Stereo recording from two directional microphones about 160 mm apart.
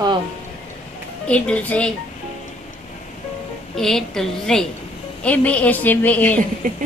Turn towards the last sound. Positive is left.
turn(degrees=-60)  # may be behind; listen again after turning